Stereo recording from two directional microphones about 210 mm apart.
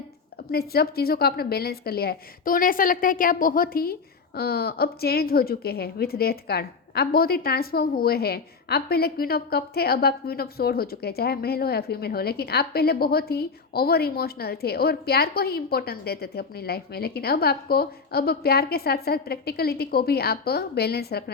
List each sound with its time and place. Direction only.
0.5 s a woman's voice: 45° left (ahead or behind)